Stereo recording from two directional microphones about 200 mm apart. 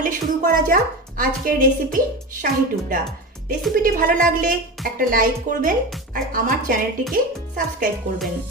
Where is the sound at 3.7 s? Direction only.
45° right (ahead or behind).